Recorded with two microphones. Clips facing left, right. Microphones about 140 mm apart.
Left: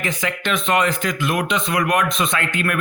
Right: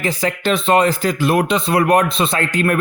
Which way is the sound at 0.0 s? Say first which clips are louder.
Right 5 dB; 35° right (ahead or behind).